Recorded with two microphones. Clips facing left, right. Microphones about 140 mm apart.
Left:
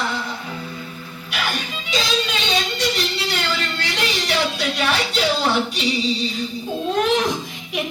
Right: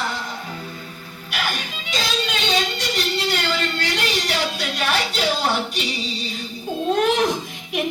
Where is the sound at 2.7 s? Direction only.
45° right (ahead or behind).